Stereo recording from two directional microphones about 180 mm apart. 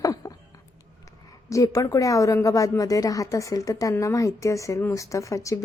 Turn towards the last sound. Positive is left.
turn(degrees=15)  # may be behind; listen again after turning